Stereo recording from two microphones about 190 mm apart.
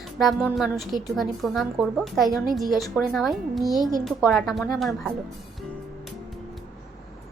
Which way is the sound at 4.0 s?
Centre (ahead or behind).